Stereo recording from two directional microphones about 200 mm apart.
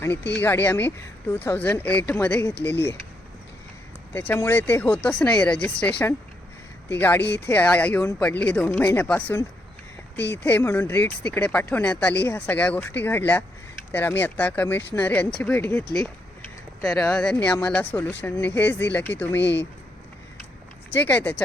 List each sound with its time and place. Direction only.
0.3 s speech: 10° left (ahead or behind)
4.1 s speech: 10° left (ahead or behind)
19.4 s speech: 60° left (ahead or behind)
20.9 s speech: 10° left (ahead or behind)